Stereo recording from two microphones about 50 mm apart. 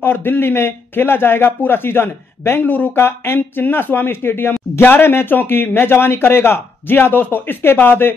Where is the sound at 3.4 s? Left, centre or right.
Left.